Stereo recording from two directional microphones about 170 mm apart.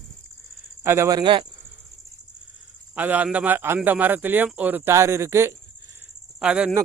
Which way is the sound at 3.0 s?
10° right (ahead or behind).